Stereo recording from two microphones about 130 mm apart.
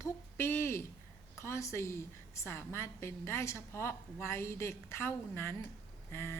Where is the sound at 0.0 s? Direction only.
20° left (ahead or behind).